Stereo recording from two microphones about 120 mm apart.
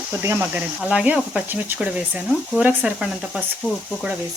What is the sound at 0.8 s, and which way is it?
Speech, 5° right (ahead or behind).